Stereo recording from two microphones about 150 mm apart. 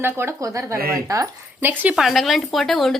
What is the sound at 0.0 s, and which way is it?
Speech, 15° right (ahead or behind).